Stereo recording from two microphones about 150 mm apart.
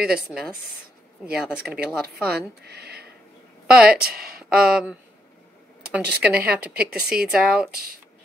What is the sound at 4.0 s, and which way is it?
Speech, 5° right (ahead or behind).